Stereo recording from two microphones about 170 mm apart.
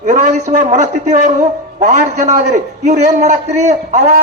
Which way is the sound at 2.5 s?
40° right (ahead or behind).